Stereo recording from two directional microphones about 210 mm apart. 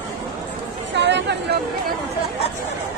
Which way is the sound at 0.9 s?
55° right (ahead or behind).